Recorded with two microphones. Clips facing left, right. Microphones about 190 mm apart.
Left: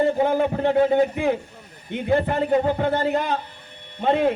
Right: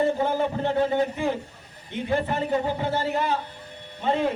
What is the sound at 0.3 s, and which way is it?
A man's voice, 55° left (ahead or behind).